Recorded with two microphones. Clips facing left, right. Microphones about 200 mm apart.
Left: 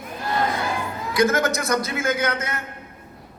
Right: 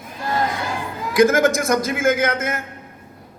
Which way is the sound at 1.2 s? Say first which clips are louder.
Right 5 dB; 50° right (ahead or behind).